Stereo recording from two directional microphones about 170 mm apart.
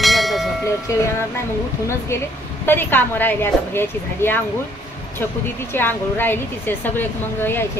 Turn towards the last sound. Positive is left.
turn(degrees=10)  # may be behind; listen again after turning